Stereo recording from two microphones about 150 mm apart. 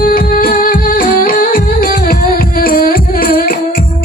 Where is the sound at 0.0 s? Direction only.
70° left (ahead or behind).